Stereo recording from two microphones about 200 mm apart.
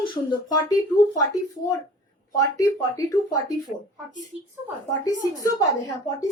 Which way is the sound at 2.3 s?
15° left (ahead or behind).